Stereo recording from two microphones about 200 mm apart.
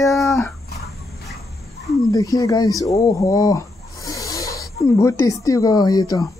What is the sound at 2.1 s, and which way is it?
Speech, 15° left (ahead or behind).